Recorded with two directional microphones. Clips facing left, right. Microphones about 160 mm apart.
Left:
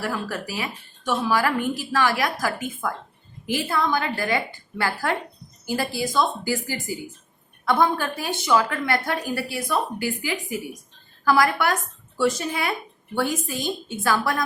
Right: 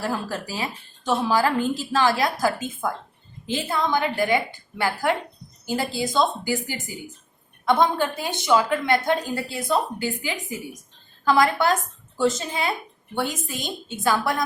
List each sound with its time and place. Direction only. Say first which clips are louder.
0.0 s a woman's voice: right 1 dB; 25° right (ahead or behind)